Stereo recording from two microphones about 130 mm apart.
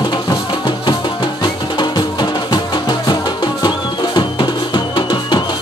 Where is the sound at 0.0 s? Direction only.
35° left (ahead or behind).